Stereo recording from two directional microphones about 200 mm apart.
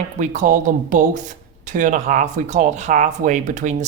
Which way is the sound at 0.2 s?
40° right (ahead or behind).